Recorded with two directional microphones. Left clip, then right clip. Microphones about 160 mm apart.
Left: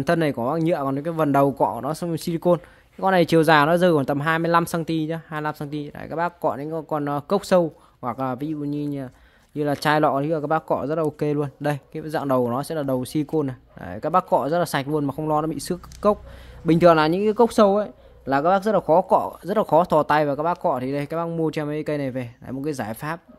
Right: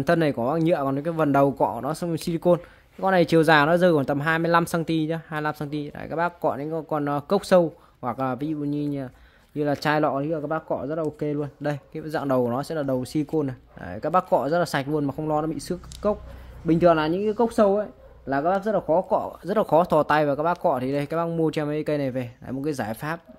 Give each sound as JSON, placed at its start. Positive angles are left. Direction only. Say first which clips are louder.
{"t": 0.0, "sound": "speech", "louder": "even", "side_deg": 15}
{"t": 11.6, "sound": "speech", "louder": "left 3 dB", "side_deg": 25}
{"t": 16.6, "sound": "a man's voice", "louder": "left 4 dB", "side_deg": 45}
{"t": 19.4, "sound": "speech", "louder": "left 2 dB", "side_deg": 20}